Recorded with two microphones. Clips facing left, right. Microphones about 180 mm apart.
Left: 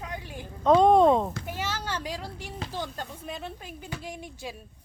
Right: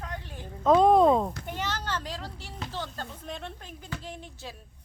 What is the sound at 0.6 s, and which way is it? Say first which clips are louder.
A child's voice: left 1 dB; centre (ahead or behind).